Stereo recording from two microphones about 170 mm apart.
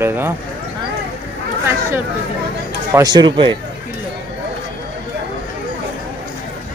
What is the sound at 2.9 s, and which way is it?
Speech, 25° right (ahead or behind).